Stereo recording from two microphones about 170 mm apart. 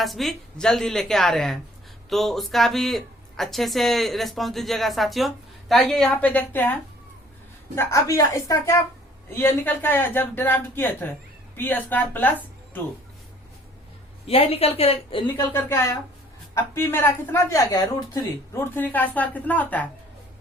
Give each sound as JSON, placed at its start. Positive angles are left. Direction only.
{"t": 0.0, "sound": "speech", "side_deg": 0}
{"t": 7.8, "sound": "speech", "side_deg": 15}
{"t": 14.3, "sound": "a woman's voice", "side_deg": 35}
{"t": 15.4, "sound": "speech", "side_deg": 15}